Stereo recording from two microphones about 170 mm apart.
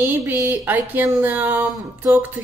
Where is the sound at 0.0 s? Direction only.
10° right (ahead or behind).